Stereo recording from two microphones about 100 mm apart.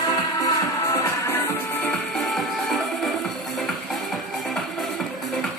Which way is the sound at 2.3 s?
Centre (ahead or behind).